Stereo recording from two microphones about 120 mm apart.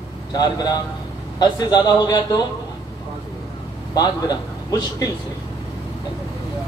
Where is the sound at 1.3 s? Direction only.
35° left (ahead or behind).